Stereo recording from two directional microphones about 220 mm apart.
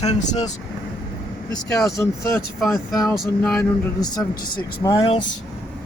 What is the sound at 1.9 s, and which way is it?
Speech, 15° left (ahead or behind).